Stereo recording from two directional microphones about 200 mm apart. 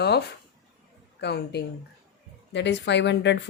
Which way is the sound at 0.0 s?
55° left (ahead or behind).